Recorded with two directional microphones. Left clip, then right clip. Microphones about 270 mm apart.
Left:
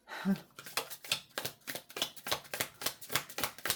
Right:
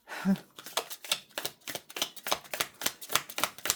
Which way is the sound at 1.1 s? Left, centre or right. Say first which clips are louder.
Right 1 dB; right.